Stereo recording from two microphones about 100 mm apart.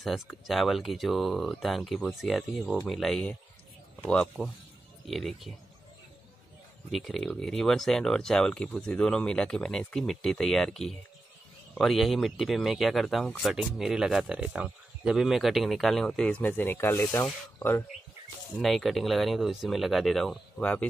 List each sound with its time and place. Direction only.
0.0 s speech: centre (ahead or behind)
4.4 s speech: centre (ahead or behind)
6.9 s speech: centre (ahead or behind); by 17.8 s 25° left (ahead or behind)
18.6 s speech: centre (ahead or behind)